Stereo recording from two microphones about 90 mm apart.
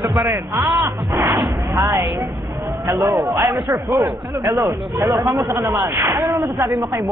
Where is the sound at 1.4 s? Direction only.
50° right (ahead or behind).